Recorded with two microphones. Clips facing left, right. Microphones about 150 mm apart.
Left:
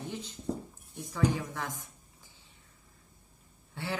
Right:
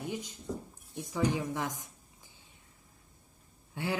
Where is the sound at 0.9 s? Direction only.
15° right (ahead or behind).